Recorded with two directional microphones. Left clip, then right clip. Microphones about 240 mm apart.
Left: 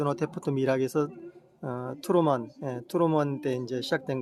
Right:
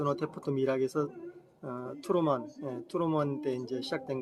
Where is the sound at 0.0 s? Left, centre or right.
Left.